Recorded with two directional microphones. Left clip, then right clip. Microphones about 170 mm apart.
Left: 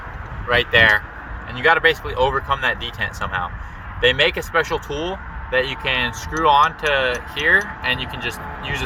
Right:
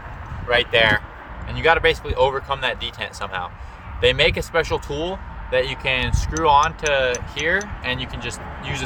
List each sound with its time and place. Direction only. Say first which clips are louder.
0.4 s speech: left 2 dB; 25° right (ahead or behind)